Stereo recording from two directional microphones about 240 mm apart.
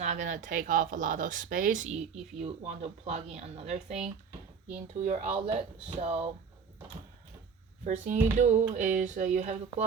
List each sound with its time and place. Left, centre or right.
0.0 s speech: right
7.9 s speech: right